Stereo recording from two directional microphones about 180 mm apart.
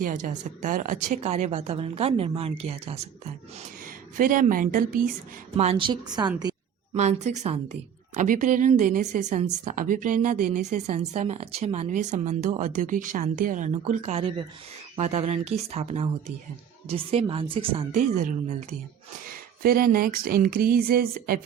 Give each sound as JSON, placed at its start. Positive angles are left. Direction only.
{"t": 0.0, "sound": "a woman's voice", "side_deg": -45}
{"t": 4.2, "sound": "speech", "side_deg": -50}
{"t": 5.5, "sound": "a woman's voice", "side_deg": -30}
{"t": 6.9, "sound": "a woman's voice", "side_deg": -40}
{"t": 19.6, "sound": "speech", "side_deg": -55}